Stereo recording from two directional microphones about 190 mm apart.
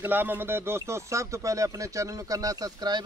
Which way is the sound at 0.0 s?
10° right (ahead or behind).